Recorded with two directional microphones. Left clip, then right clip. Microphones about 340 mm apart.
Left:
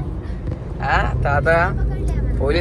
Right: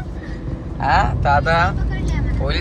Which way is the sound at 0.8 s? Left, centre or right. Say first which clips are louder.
Right 3 dB; centre.